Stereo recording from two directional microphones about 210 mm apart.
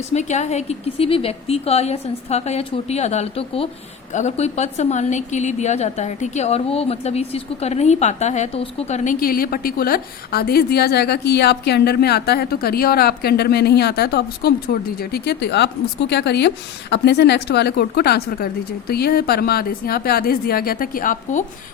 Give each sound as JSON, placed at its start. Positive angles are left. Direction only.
{"t": 0.1, "sound": "a woman's voice", "side_deg": 35}
{"t": 9.2, "sound": "a woman's voice", "side_deg": 45}